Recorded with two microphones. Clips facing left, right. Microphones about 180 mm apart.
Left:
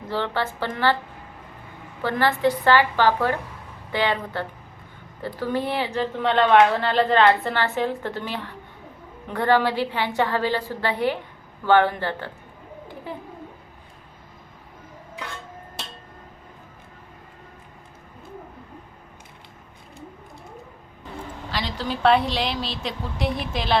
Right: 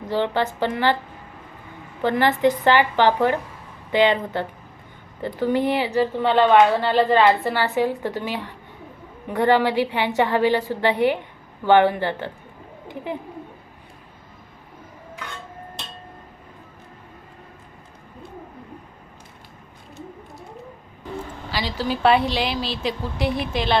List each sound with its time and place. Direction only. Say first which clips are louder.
0.1 s a woman's voice: right 4 dB; 15° right (ahead or behind)
2.0 s a woman's voice: right 3 dB; 20° right (ahead or behind)
21.5 s a woman's voice: right 3 dB; 5° right (ahead or behind)